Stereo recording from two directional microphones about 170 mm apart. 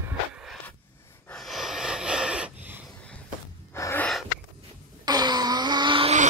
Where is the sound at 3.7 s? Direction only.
15° left (ahead or behind).